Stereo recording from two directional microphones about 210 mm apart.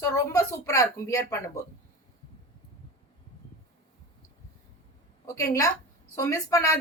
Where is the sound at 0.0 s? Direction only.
15° left (ahead or behind).